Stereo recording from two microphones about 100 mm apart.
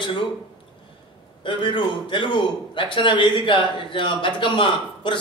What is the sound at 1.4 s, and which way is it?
A man's voice, 55° left (ahead or behind).